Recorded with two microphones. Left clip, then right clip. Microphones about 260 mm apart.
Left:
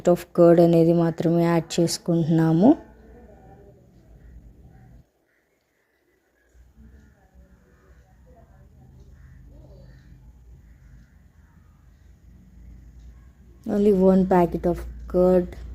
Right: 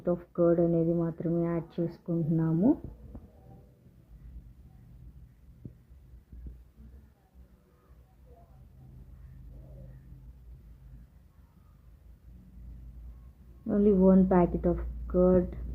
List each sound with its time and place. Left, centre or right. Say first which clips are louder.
0.0 s speech: left 10 dB; left
13.7 s a woman's voice: left 6 dB; left